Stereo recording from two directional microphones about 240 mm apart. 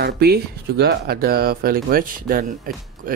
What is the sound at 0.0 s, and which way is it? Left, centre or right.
Speech, right.